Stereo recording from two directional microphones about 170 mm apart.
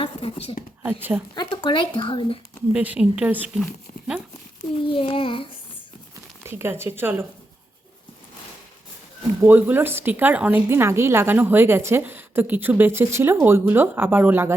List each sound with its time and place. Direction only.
0.0 s a sound: 35° left (ahead or behind)
0.8 s a woman's voice: 10° right (ahead or behind)
1.4 s speech: 30° left (ahead or behind)
2.7 s a woman's voice: 10° right (ahead or behind)
4.7 s child singing: 35° left (ahead or behind)
6.4 s a woman's voice: 15° right (ahead or behind)
9.4 s a woman's voice: 10° right (ahead or behind)